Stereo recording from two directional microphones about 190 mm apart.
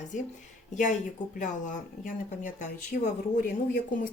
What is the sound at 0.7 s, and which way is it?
Speech, 40° left (ahead or behind).